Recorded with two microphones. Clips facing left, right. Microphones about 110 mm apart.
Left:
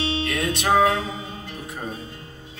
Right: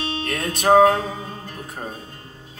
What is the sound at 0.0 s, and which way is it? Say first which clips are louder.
Music: left 1 dB; 45° right (ahead or behind).